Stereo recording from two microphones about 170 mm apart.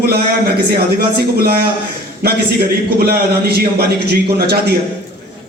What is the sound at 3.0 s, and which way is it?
A man's voice, 65° right (ahead or behind).